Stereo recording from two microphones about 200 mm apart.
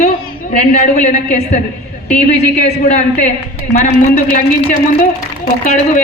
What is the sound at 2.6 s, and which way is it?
Speech, 35° left (ahead or behind).